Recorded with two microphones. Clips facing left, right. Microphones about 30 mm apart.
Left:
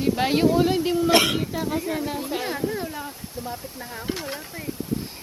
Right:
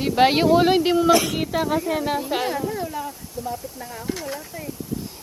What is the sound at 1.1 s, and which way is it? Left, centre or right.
Speech, left.